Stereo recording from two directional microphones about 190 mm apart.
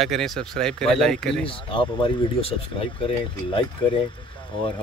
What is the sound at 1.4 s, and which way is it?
Speech, 25° left (ahead or behind).